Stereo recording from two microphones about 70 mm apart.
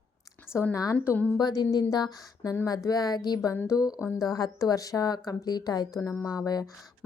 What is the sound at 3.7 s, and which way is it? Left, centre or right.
A woman's voice, left.